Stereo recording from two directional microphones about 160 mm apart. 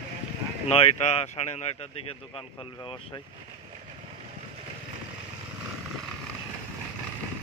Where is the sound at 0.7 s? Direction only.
40° left (ahead or behind).